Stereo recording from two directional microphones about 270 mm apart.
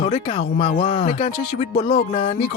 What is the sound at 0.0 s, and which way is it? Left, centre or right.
Speech, left.